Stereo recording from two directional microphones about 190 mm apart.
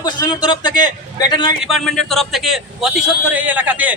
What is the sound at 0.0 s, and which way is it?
A man's voice, 20° left (ahead or behind).